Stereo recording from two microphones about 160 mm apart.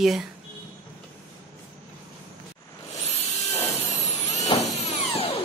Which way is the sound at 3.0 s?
40° left (ahead or behind).